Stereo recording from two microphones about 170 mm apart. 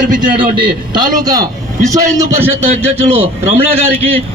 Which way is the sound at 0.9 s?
55° right (ahead or behind).